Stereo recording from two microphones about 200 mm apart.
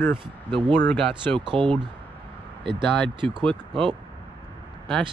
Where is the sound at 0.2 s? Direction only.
25° right (ahead or behind).